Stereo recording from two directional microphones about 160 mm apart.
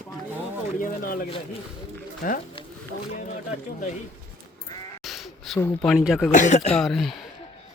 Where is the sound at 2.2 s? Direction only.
60° left (ahead or behind).